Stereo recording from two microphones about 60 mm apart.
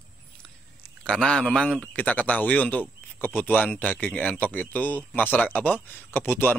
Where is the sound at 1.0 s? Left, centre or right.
Centre.